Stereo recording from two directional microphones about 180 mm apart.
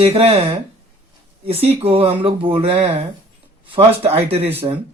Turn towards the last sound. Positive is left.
turn(degrees=-35)  # may be behind; listen again after turning